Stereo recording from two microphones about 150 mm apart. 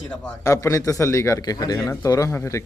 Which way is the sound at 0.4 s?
20° left (ahead or behind).